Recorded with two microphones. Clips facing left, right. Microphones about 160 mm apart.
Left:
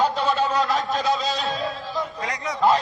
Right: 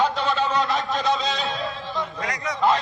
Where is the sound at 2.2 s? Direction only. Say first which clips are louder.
Even; 30° left (ahead or behind).